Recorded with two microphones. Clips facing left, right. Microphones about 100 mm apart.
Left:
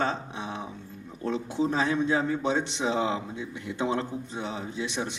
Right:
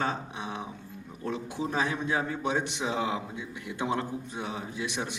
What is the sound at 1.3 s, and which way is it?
Speech, 25° left (ahead or behind).